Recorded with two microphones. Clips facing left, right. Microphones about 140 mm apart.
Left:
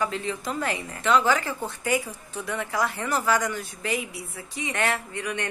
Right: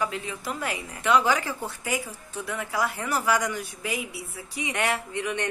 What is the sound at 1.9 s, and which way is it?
Speech, centre (ahead or behind).